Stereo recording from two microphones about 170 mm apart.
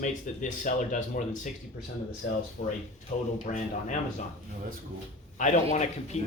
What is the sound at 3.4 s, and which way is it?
Speech, 45° left (ahead or behind).